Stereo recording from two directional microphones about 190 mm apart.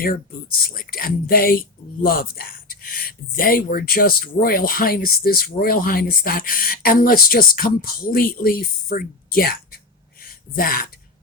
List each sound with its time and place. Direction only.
0.7 s speech: 50° left (ahead or behind)